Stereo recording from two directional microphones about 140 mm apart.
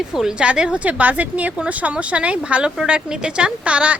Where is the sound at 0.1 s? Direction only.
5° right (ahead or behind).